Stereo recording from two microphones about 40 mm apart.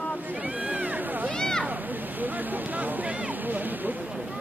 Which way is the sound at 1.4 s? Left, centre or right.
Centre.